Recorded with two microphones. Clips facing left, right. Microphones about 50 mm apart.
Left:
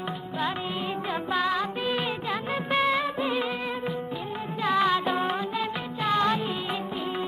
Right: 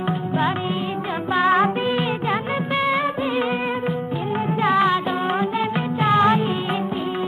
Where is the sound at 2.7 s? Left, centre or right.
Centre.